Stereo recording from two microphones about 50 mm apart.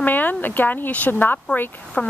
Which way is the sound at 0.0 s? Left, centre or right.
Left.